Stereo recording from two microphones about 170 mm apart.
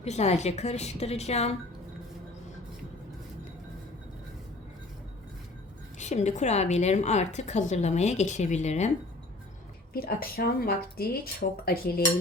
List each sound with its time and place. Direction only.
0.0 s a woman's voice: 40° left (ahead or behind)
6.0 s a woman's voice: 45° left (ahead or behind)
9.9 s speech: 60° left (ahead or behind)